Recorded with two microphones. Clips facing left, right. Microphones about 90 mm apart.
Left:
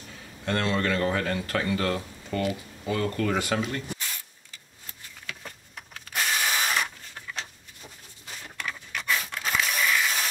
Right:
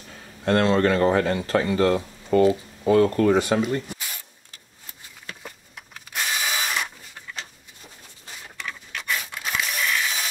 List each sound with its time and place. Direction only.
0.5 s speech: 40° right (ahead or behind)
2.8 s speech: 40° right (ahead or behind); by 3.6 s 25° right (ahead or behind)
5.9 s drill: centre (ahead or behind)
8.5 s a sound: centre (ahead or behind)